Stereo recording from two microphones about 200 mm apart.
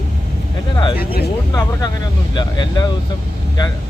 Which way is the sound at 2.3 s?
20° left (ahead or behind).